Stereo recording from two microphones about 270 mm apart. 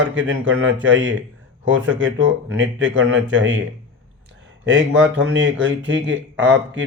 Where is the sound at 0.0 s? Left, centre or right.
Right.